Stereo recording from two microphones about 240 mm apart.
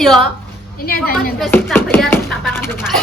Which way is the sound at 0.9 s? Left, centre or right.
Left.